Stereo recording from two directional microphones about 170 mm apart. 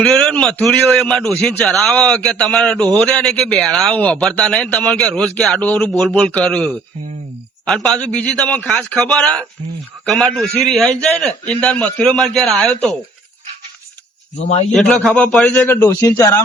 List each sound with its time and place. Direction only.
0.0 s a man's voice: 5° left (ahead or behind)
14.4 s a man's voice: 40° left (ahead or behind)
14.7 s a man's voice: 5° left (ahead or behind); by 16.4 s 20° left (ahead or behind)